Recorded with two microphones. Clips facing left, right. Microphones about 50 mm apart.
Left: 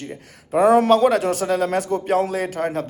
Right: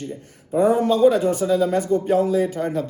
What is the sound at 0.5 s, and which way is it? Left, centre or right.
Speech, left.